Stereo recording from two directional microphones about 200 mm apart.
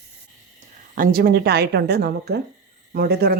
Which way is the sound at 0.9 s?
45° right (ahead or behind).